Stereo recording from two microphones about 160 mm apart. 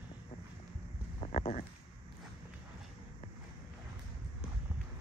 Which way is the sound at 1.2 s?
40° left (ahead or behind).